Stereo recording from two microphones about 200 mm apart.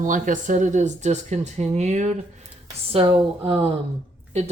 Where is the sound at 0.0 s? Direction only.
40° right (ahead or behind).